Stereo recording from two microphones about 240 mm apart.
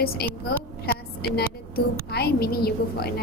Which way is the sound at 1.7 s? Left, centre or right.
Left.